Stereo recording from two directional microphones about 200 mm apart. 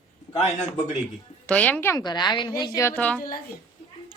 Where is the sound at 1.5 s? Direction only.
5° left (ahead or behind); by 2.7 s 20° left (ahead or behind).